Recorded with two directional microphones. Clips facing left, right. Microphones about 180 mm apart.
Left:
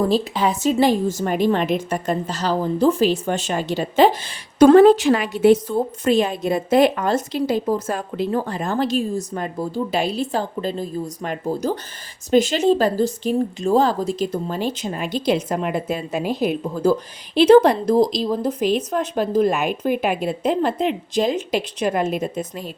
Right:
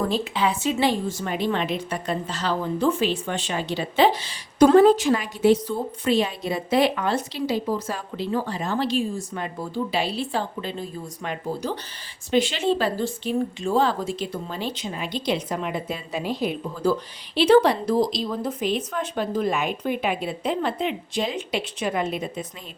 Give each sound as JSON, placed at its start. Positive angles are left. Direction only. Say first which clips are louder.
{"t": 0.1, "sound": "a woman's voice", "louder": "left 4 dB", "side_deg": 40}
{"t": 16.8, "sound": "a woman's voice", "louder": "left 4 dB", "side_deg": 45}
{"t": 18.6, "sound": "a woman's voice", "louder": "left 5 dB", "side_deg": 0}
{"t": 18.9, "sound": "a woman's voice", "louder": "left 5 dB", "side_deg": 40}